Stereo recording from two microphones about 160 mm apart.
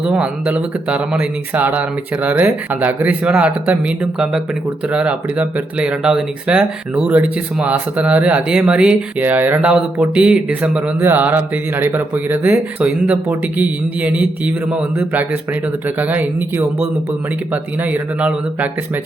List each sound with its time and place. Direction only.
0.0 s speech: 5° right (ahead or behind)